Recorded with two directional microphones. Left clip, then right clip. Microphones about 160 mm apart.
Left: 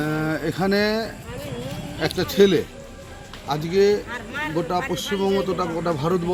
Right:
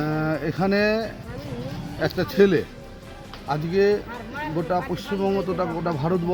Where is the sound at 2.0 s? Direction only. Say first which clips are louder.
Left 1 dB; 25° right (ahead or behind).